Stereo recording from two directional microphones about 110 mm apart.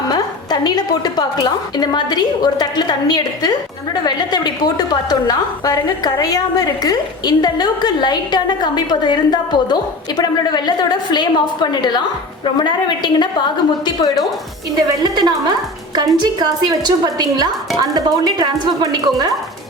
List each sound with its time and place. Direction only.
0.1 s a woman's voice: 35° left (ahead or behind)
14.8 s speech: 40° right (ahead or behind)